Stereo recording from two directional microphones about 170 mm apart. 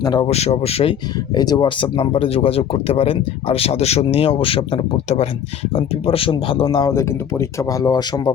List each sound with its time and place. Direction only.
0.0 s speech: 25° left (ahead or behind)
0.3 s speech: 40° left (ahead or behind)
1.4 s speech: 25° left (ahead or behind)